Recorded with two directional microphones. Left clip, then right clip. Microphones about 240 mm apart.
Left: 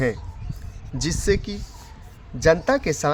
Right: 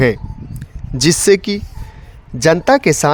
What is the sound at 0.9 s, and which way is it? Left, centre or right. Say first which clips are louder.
Speech: right 12 dB; right.